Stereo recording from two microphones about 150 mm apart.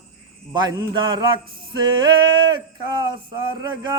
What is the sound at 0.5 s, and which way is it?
Speech, 30° right (ahead or behind).